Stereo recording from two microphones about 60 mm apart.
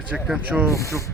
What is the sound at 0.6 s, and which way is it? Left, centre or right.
Speech, left.